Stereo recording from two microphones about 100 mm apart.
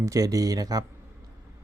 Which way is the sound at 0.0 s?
35° right (ahead or behind).